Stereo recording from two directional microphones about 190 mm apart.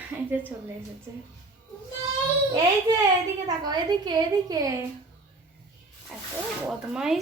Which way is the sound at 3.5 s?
20° right (ahead or behind).